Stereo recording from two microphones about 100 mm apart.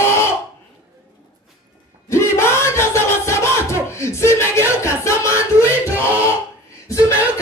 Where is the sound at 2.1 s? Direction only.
25° left (ahead or behind).